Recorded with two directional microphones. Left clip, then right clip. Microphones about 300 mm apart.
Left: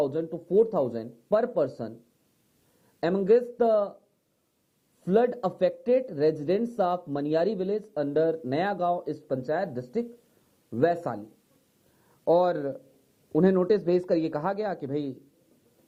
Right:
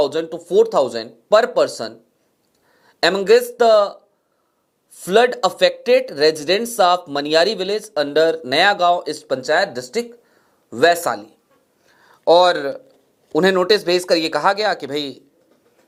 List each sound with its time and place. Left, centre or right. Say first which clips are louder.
0.0 s speech: right 9 dB; centre
1.7 s speech: right 10 dB; centre
3.0 s speech: right 9 dB; centre
5.0 s speech: right 10 dB; centre
12.0 s a sound: right 10 dB; centre
12.4 s speech: right 11 dB; centre